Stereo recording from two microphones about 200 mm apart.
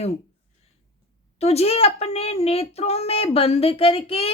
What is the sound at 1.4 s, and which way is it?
A woman's voice, 30° left (ahead or behind).